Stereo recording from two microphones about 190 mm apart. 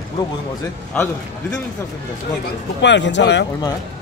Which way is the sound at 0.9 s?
10° left (ahead or behind).